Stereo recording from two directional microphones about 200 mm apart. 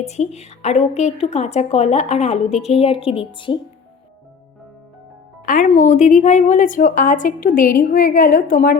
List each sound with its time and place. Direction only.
0.0 s a woman's voice: 35° left (ahead or behind)
5.5 s a woman's voice: 40° left (ahead or behind)